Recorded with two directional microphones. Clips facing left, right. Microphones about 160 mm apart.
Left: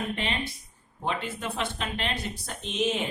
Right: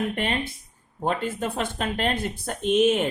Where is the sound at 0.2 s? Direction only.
50° right (ahead or behind).